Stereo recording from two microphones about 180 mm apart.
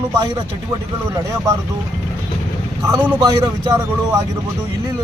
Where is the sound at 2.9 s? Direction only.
20° right (ahead or behind).